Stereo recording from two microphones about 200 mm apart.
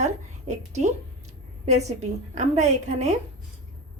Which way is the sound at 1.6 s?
35° right (ahead or behind).